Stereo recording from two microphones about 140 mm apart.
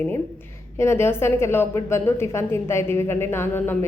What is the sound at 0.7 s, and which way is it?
A woman's voice, 20° left (ahead or behind).